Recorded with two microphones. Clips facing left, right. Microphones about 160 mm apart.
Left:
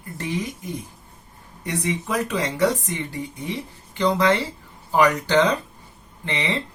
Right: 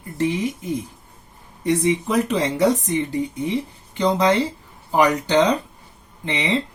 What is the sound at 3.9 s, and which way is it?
Speech, 20° right (ahead or behind).